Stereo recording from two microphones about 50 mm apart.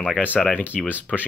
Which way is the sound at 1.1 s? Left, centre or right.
Centre.